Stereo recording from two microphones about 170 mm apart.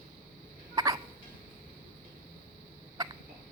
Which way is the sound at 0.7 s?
20° right (ahead or behind).